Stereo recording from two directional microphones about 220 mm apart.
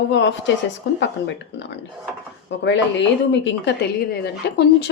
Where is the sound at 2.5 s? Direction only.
55° left (ahead or behind).